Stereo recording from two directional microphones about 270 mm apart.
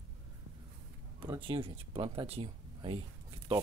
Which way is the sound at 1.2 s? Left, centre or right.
Centre.